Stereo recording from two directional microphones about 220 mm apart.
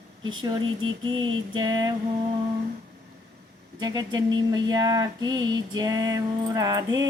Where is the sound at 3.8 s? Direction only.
20° right (ahead or behind).